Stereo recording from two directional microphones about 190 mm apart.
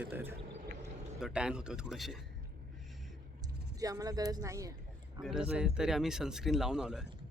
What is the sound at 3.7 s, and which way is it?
Speech, 20° right (ahead or behind).